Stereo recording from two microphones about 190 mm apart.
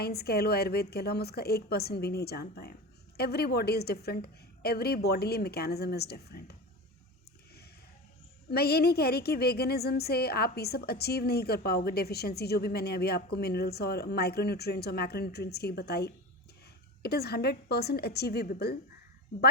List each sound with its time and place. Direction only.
0.0 s a woman's voice: 55° left (ahead or behind)
8.4 s a woman's voice: 55° left (ahead or behind)